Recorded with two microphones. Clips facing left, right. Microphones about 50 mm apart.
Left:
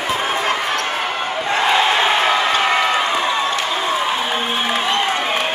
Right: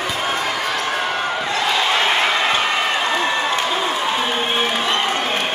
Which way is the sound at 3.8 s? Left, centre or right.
Centre.